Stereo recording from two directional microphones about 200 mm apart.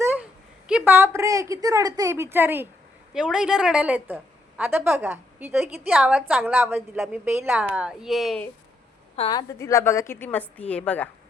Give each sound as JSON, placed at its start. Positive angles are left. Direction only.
{"t": 0.7, "sound": "a woman's voice", "side_deg": -10}
{"t": 9.1, "sound": "a woman's voice", "side_deg": 30}
{"t": 9.5, "sound": "a woman's voice", "side_deg": 15}